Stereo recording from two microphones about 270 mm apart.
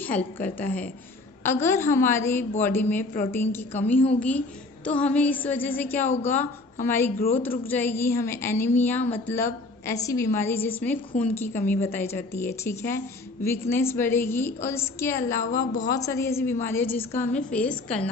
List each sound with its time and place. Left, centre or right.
0.0 s a woman's voice: centre
15.5 s speech: left
16.0 s a woman's voice: centre